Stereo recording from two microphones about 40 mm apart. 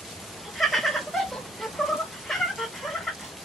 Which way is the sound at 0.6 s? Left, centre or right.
Centre.